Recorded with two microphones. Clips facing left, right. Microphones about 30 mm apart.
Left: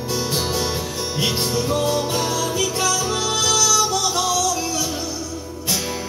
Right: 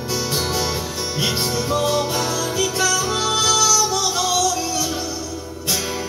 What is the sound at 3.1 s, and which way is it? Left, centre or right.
Music, centre.